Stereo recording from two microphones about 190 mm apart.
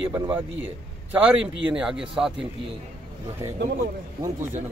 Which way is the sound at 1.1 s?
5° right (ahead or behind).